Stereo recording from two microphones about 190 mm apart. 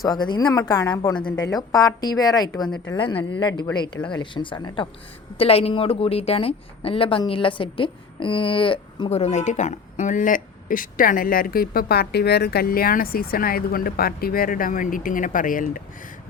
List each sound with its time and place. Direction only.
0.0 s a woman's voice: 20° left (ahead or behind); by 15.8 s 45° left (ahead or behind)